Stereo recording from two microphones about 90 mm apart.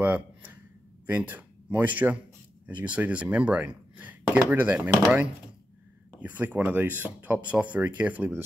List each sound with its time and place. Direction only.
0.0 s a sound: 20° right (ahead or behind)
1.0 s speech: 20° right (ahead or behind)
6.2 s speech: 20° right (ahead or behind)